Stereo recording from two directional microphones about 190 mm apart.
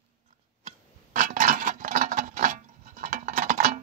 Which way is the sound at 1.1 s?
45° right (ahead or behind).